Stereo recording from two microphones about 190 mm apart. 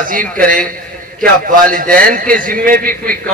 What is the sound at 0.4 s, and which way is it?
A man's voice, 50° right (ahead or behind).